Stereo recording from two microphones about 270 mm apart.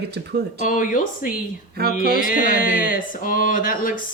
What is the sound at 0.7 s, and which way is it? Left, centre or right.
Speech, left.